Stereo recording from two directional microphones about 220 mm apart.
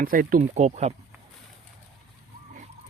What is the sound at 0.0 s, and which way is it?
Speech, 40° right (ahead or behind).